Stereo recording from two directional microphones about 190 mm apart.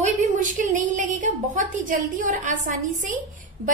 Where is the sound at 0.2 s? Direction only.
40° right (ahead or behind).